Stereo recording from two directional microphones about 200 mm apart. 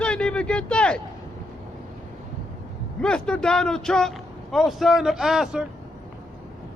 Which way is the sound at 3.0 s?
5° left (ahead or behind).